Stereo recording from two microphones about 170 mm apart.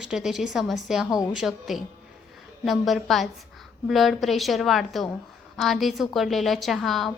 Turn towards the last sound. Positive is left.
turn(degrees=0)  # may be behind; listen again after turning